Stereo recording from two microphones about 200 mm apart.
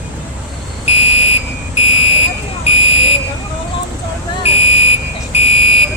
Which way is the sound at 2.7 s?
30° left (ahead or behind).